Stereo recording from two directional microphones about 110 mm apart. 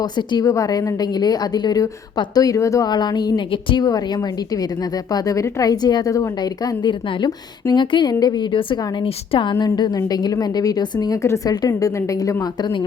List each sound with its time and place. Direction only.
0.0 s a woman's voice: 40° left (ahead or behind)
0.4 s a woman's voice: 30° left (ahead or behind); by 3.8 s 45° left (ahead or behind)
3.8 s a woman's voice: 35° left (ahead or behind)